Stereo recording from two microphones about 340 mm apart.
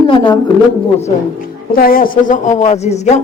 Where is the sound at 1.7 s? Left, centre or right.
Left.